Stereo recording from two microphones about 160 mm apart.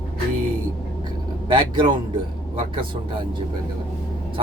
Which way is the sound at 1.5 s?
30° right (ahead or behind).